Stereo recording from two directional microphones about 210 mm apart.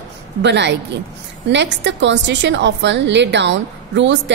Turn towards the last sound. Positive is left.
turn(degrees=-60)  # may be behind; listen again after turning